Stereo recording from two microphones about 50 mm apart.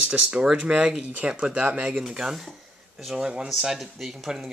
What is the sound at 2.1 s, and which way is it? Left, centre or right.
Speech, centre.